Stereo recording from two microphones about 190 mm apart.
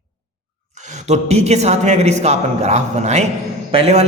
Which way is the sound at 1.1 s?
35° right (ahead or behind).